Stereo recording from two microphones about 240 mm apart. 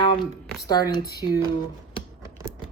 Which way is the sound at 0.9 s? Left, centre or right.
Centre.